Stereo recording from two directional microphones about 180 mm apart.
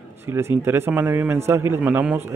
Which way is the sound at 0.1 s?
15° right (ahead or behind).